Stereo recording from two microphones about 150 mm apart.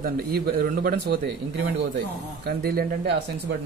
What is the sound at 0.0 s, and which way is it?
A man's voice, 85° right.